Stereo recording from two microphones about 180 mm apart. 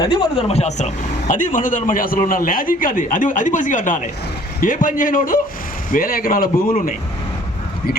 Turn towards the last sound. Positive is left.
turn(degrees=50)  # may be behind; listen again after turning